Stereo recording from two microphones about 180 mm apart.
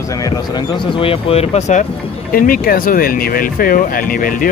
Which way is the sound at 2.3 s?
50° left (ahead or behind).